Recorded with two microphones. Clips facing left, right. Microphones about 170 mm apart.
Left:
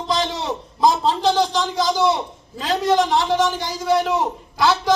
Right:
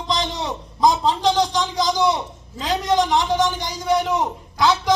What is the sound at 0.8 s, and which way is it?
A man's voice, 15° right (ahead or behind).